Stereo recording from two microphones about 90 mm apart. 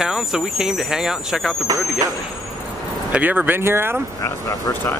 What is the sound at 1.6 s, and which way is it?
Speech, 45° right (ahead or behind).